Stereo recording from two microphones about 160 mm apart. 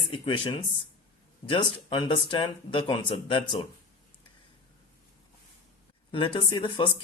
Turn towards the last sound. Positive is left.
turn(degrees=30)  # may be behind; listen again after turning